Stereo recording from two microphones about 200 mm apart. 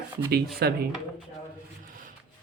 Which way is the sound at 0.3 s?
50° right (ahead or behind).